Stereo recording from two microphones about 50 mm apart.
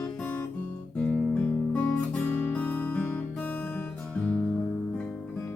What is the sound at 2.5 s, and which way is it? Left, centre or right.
Music, left.